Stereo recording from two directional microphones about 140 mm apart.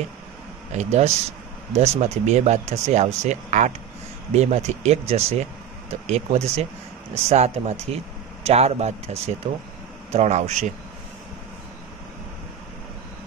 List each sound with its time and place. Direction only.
0.7 s speech: 55° right (ahead or behind)